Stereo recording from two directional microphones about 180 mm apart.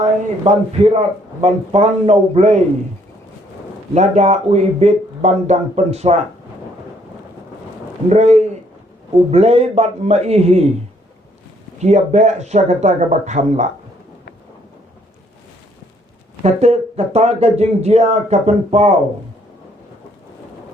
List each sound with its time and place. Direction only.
0.0 s a man's voice: 35° right (ahead or behind)
3.9 s a man's voice: 40° right (ahead or behind)
8.1 s a man's voice: 40° right (ahead or behind)
11.8 s a man's voice: 40° right (ahead or behind)
16.4 s a man's voice: 40° right (ahead or behind)